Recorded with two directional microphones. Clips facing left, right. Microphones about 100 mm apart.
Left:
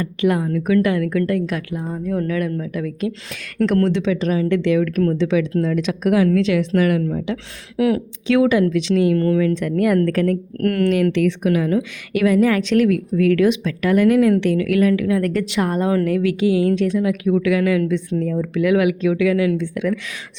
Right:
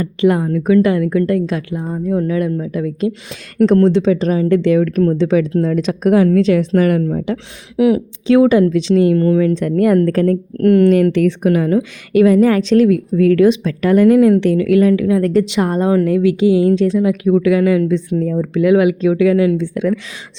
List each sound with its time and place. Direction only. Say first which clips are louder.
0.0 s a woman's voice: right 5 dB; 30° right (ahead or behind)
7.8 s a woman's voice: right 5 dB; 20° right (ahead or behind)
8.3 s a woman's voice: right 5 dB; 35° right (ahead or behind)
9.1 s a woman's voice: right 4 dB; 20° right (ahead or behind)
9.6 s a woman's voice: right 4 dB; 35° right (ahead or behind)
10.6 s a woman's voice: right 9 dB; 20° right (ahead or behind)
10.8 s a woman's voice: right 5 dB; 40° right (ahead or behind)